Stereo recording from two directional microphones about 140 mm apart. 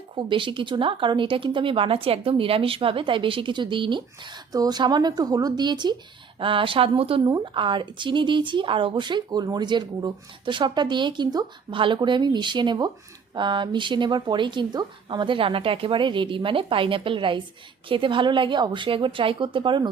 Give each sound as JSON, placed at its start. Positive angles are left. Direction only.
{"t": 0.3, "sound": "speech", "side_deg": -35}